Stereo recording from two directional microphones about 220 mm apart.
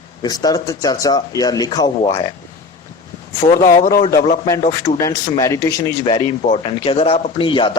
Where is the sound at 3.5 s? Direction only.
40° left (ahead or behind).